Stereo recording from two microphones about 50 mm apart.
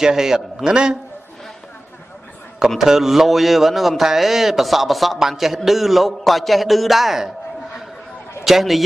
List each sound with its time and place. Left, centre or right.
0.0 s a man's voice: centre
2.8 s a man's voice: centre